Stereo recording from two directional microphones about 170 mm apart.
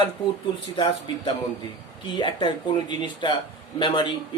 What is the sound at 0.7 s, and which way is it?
Speech, 30° left (ahead or behind).